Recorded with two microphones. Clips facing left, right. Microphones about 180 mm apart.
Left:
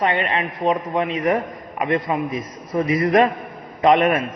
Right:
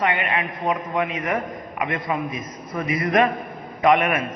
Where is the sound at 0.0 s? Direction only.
30° left (ahead or behind).